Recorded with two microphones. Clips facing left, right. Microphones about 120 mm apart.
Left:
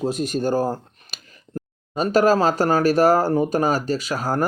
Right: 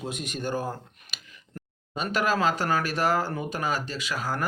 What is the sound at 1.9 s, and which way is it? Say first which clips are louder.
Speech: left 9 dB; 40° left (ahead or behind).